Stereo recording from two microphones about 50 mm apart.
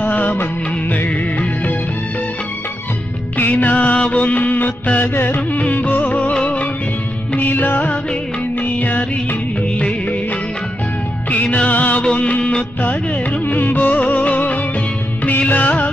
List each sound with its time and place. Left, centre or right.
0.1 s music of bollywood: left
3.5 s music: left
7.3 s music: left
8.7 s music of bollywood: left
11.2 s music: left
13.5 s music: left
15.2 s music of bollywood: left